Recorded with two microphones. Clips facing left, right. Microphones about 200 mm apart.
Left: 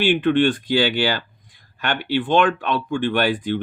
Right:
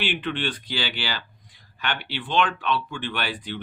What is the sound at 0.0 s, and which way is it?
Speech, 45° left (ahead or behind).